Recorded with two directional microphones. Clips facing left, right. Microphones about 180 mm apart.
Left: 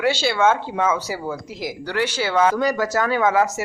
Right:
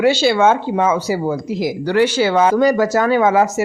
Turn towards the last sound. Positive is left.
turn(degrees=-20)  # may be behind; listen again after turning